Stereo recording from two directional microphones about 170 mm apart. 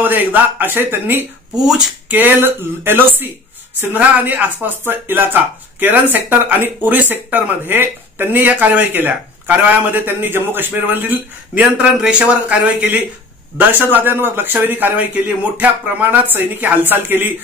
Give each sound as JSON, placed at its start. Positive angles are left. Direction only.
{"t": 0.0, "sound": "speech", "side_deg": -10}